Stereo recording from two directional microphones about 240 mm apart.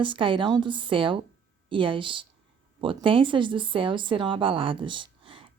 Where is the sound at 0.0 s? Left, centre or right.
Right.